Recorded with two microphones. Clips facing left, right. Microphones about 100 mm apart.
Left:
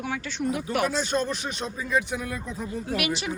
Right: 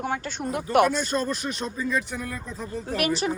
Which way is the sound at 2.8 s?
40° right (ahead or behind).